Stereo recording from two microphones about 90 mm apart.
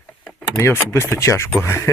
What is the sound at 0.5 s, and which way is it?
Speech, 25° left (ahead or behind).